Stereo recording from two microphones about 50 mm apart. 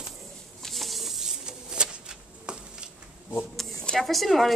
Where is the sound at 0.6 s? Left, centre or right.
Centre.